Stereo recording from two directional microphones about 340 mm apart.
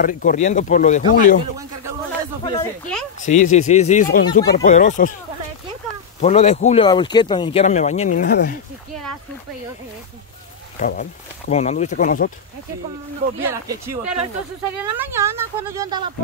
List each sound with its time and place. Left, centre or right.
0.0 s speech: left
2.4 s speech: centre
6.2 s speech: centre
10.8 s speech: left
13.4 s speech: centre